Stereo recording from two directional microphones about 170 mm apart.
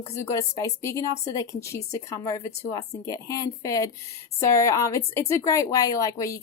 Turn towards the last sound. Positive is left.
turn(degrees=20)  # may be behind; listen again after turning